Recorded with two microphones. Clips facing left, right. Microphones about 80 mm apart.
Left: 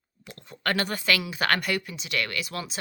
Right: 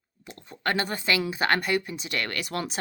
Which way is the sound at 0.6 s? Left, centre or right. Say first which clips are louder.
Even; right.